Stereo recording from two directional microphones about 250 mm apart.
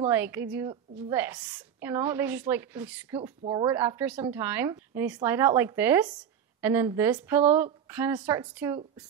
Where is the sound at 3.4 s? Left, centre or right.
Right.